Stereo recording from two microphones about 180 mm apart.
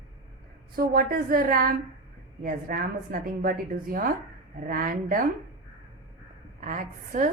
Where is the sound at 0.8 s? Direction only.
55° right (ahead or behind).